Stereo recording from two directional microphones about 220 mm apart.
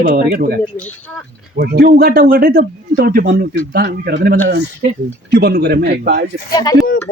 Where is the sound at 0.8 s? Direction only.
5° left (ahead or behind).